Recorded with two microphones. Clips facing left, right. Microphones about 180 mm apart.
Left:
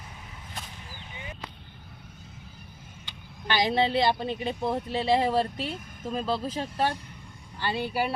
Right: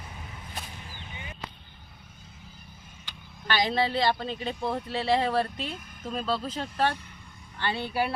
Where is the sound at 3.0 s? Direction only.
20° left (ahead or behind).